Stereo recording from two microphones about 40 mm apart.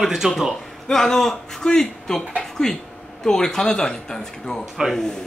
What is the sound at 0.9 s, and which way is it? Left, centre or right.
Speech, centre.